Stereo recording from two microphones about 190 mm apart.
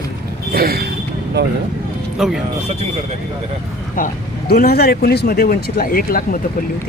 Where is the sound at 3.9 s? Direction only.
45° left (ahead or behind).